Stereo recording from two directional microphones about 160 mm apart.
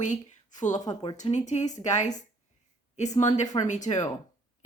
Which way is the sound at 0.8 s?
25° left (ahead or behind).